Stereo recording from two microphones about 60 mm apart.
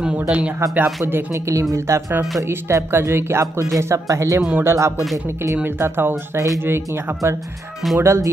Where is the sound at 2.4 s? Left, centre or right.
Right.